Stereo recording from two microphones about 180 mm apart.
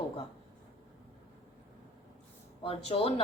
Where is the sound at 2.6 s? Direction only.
30° left (ahead or behind).